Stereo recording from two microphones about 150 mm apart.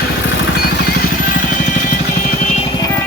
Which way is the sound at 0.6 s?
90° left.